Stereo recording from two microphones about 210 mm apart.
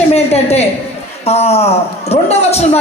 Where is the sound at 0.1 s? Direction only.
30° left (ahead or behind).